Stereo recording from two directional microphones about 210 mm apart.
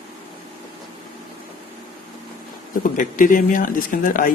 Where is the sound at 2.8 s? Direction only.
40° left (ahead or behind).